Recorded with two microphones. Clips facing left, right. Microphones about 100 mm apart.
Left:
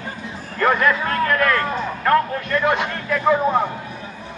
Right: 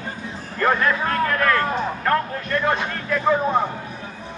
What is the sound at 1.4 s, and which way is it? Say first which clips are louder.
Speech: even; 25° right (ahead or behind).